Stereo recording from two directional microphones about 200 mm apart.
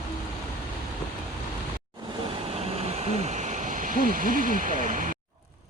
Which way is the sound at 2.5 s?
30° right (ahead or behind).